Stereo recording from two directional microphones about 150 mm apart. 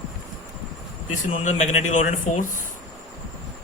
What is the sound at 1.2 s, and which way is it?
Speech, 55° left (ahead or behind).